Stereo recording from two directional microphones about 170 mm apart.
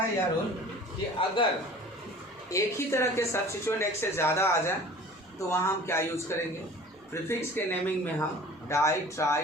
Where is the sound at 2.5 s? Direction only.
15° left (ahead or behind).